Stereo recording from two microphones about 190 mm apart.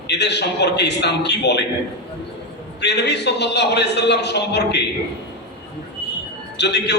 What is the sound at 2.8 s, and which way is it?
A man's voice, 60° left (ahead or behind).